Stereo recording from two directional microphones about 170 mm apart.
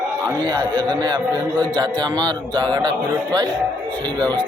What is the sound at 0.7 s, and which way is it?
A man's voice, 25° right (ahead or behind).